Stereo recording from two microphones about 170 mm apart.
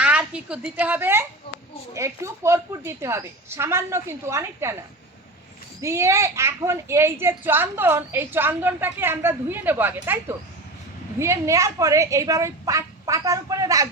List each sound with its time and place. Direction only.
0.0 s a woman's voice: 10° right (ahead or behind)
5.8 s a woman's voice: 15° right (ahead or behind)